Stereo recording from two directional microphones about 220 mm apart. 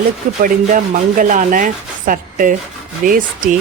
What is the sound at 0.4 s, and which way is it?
Speech, 35° right (ahead or behind).